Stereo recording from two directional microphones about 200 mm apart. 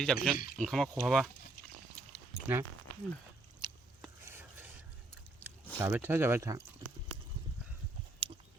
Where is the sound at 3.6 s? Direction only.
20° right (ahead or behind).